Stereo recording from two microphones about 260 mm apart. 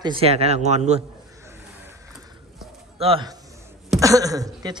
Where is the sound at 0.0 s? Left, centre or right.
Right.